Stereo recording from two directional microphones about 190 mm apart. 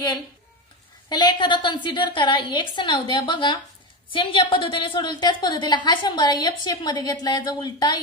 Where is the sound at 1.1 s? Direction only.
25° left (ahead or behind).